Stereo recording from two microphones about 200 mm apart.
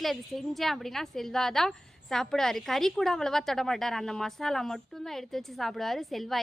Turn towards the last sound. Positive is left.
turn(degrees=0)  # may be behind; listen again after turning